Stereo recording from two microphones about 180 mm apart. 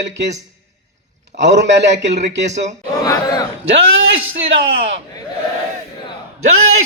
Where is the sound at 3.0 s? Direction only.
20° left (ahead or behind).